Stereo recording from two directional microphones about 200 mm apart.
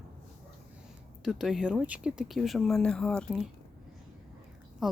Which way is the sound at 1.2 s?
Centre (ahead or behind).